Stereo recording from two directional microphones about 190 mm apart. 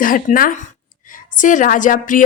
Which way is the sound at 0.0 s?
45° left (ahead or behind).